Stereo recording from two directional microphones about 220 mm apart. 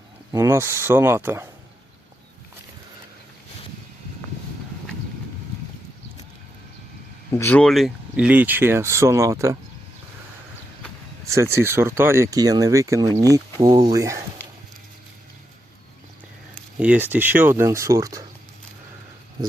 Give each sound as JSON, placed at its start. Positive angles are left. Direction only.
{"t": 0.3, "sound": "speech", "side_deg": -10}
{"t": 7.3, "sound": "speech", "side_deg": 10}
{"t": 11.3, "sound": "speech", "side_deg": -10}
{"t": 16.8, "sound": "speech", "side_deg": -5}